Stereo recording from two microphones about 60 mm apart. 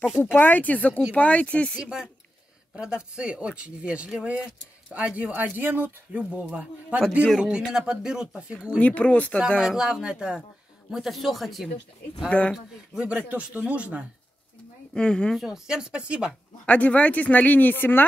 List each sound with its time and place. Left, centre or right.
0.2 s speech: left
1.8 s speech: centre; by 6.4 s right
7.0 s speech: centre
8.7 s speech: left
9.6 s speech: centre
10.9 s speech: centre
12.3 s speech: left
12.9 s speech: right
15.0 s speech: centre
15.3 s speech: centre
16.6 s speech: left